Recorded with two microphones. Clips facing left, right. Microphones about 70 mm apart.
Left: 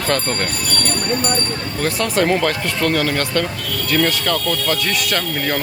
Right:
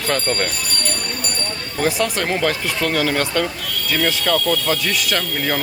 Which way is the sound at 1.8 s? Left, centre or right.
Centre.